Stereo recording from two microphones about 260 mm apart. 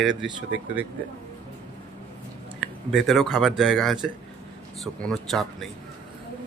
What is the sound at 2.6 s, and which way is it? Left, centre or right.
A man's voice, centre.